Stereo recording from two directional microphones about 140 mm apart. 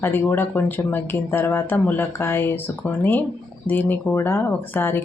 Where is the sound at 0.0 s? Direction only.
15° left (ahead or behind).